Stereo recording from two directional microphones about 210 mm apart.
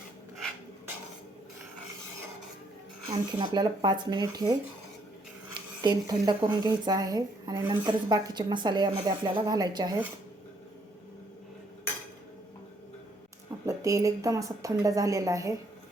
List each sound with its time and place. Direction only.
3.1 s a woman's voice: 25° right (ahead or behind)
5.5 s a woman's voice: 20° right (ahead or behind)
13.7 s a woman's voice: 15° right (ahead or behind)